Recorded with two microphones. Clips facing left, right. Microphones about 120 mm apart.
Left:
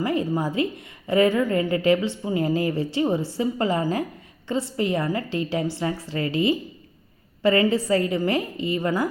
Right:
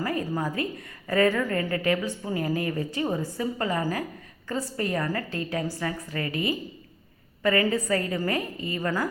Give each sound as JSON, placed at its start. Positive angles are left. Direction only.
{"t": 0.0, "sound": "a woman's voice", "side_deg": 25}